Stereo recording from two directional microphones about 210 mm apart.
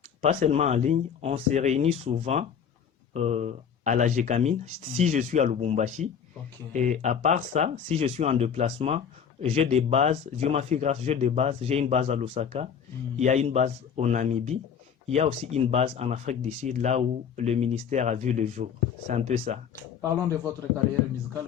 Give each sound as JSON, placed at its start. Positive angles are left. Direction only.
{"t": 0.2, "sound": "speech", "side_deg": -30}